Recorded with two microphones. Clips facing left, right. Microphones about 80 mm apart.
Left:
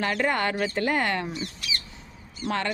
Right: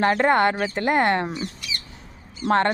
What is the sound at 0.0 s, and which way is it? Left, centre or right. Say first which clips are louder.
Speech: right 7 dB; right.